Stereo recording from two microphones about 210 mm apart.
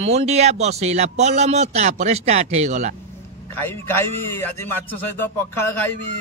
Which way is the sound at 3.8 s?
10° left (ahead or behind).